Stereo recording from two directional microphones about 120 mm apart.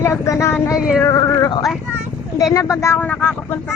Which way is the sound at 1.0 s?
25° left (ahead or behind).